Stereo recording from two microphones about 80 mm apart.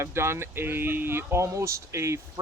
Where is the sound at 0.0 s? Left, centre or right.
Right.